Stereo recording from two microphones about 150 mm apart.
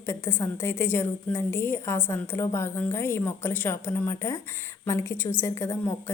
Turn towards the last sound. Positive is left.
turn(degrees=15)  # may be behind; listen again after turning